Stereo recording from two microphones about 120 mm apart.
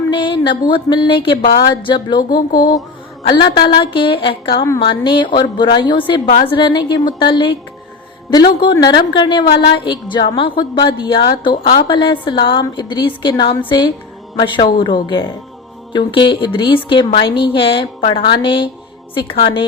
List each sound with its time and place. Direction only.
0.1 s a woman's voice: 45° left (ahead or behind)